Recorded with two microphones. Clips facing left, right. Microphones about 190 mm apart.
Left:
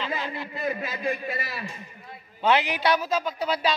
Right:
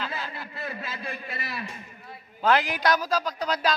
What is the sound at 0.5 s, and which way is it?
Speech, 20° left (ahead or behind).